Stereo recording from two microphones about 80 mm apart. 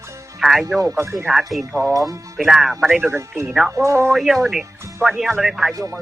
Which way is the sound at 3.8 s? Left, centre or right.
Right.